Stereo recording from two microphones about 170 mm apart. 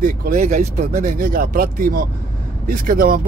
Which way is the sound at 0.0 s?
50° right (ahead or behind).